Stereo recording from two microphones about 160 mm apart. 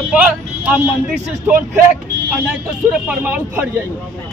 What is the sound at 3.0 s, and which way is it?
Speech, 10° right (ahead or behind).